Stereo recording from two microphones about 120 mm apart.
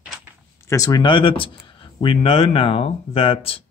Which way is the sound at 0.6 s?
30° left (ahead or behind).